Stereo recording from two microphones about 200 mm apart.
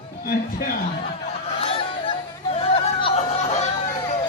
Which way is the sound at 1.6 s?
25° left (ahead or behind).